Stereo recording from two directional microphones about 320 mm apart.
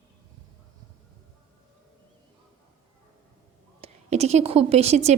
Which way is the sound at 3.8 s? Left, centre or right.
Centre.